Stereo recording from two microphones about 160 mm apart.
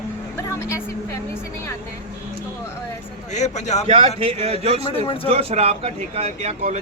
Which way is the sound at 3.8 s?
40° right (ahead or behind).